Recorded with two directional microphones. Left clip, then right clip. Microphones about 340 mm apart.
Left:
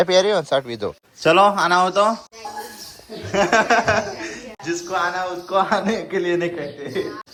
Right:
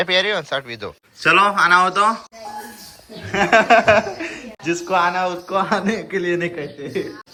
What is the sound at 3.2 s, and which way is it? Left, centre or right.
Speech, centre.